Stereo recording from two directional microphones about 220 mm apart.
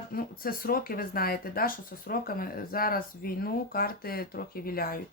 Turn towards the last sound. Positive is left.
turn(degrees=40)  # may be behind; listen again after turning